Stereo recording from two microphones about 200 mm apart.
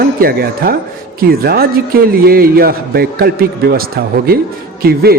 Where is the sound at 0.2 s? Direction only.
50° right (ahead or behind).